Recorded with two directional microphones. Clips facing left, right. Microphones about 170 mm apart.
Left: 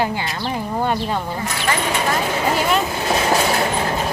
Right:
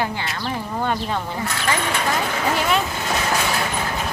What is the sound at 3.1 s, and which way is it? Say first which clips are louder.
Train: left 5 dB; 30° left (ahead or behind).